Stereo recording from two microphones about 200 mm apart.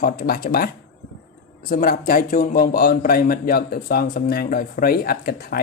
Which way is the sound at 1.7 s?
45° left (ahead or behind).